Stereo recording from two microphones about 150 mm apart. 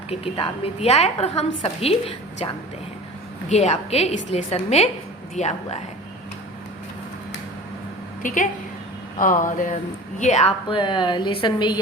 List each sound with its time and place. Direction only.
0.1 s a woman's voice: 40° left (ahead or behind)
3.5 s a woman's voice: 45° left (ahead or behind)
8.2 s speech: 60° left (ahead or behind)
10.2 s a woman's voice: 50° left (ahead or behind)
10.7 s a woman's voice: 35° left (ahead or behind)